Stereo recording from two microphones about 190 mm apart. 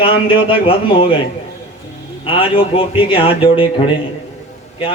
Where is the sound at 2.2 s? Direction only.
30° left (ahead or behind).